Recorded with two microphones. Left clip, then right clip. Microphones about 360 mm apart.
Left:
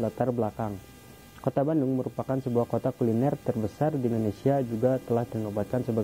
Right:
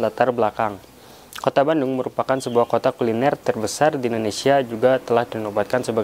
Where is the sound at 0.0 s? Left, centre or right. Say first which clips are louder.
Right 10 dB; centre.